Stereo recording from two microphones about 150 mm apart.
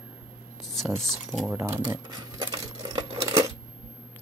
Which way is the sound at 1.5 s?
15° right (ahead or behind).